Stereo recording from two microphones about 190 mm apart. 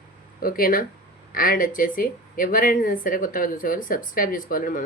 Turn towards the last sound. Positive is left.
turn(degrees=45)  # may be behind; listen again after turning